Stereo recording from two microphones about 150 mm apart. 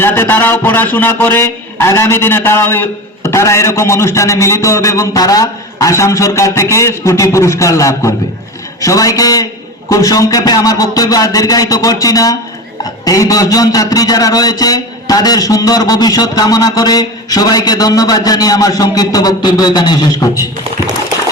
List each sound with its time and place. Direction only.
0.0 s a man's voice: 15° left (ahead or behind)